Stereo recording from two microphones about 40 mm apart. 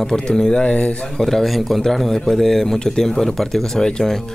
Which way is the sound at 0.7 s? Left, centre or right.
Left.